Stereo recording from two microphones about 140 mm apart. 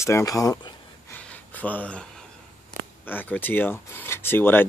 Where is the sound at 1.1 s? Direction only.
10° left (ahead or behind).